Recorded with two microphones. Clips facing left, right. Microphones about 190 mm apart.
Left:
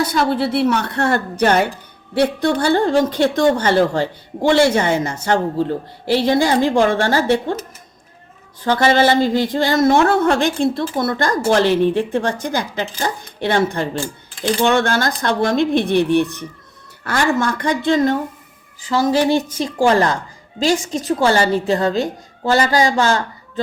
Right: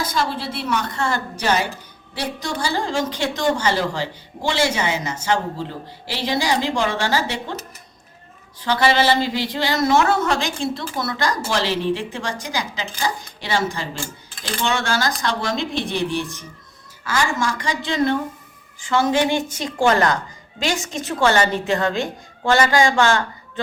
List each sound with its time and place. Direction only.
0.0 s a woman's voice: 65° left (ahead or behind)
8.6 s a woman's voice: 50° left (ahead or behind); by 20.1 s 30° left (ahead or behind)
21.2 s a woman's voice: 35° left (ahead or behind)